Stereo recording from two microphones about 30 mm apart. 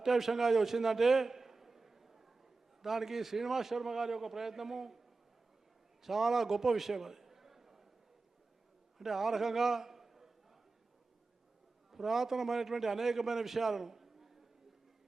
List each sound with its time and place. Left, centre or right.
0.0 s a sound: centre
2.8 s a man's voice: centre
6.0 s a man's voice: centre
9.0 s a man's voice: centre
11.9 s a man's voice: centre